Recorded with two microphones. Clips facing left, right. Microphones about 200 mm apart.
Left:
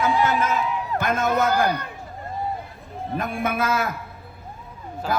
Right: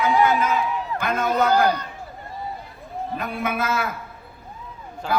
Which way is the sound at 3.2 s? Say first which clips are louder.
Left 2 dB; 45° left (ahead or behind).